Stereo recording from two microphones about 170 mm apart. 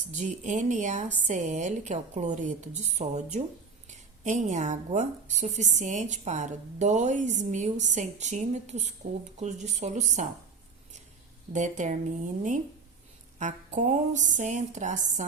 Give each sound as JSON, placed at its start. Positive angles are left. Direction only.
{"t": 0.1, "sound": "a woman's voice", "side_deg": -45}
{"t": 11.5, "sound": "a woman's voice", "side_deg": -45}